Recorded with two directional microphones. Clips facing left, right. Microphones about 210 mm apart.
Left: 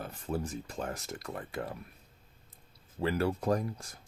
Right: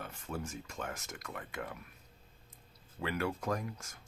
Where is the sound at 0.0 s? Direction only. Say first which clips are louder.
Left 6 dB; 35° left (ahead or behind).